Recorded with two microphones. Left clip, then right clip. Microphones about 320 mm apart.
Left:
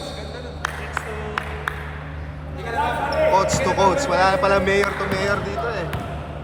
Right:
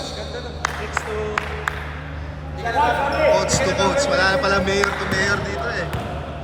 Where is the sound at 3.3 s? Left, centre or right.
Centre.